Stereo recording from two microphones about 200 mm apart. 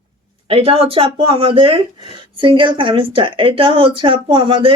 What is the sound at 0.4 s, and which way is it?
Speech, 30° right (ahead or behind).